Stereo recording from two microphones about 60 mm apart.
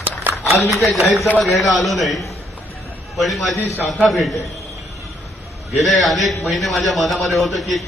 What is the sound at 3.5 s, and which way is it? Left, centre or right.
Speech, left.